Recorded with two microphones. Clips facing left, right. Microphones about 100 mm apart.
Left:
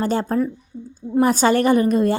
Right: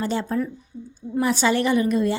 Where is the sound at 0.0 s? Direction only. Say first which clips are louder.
Left 4 dB; 45° left (ahead or behind).